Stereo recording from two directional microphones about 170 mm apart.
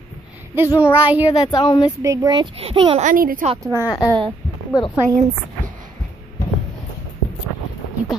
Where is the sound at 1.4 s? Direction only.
25° left (ahead or behind).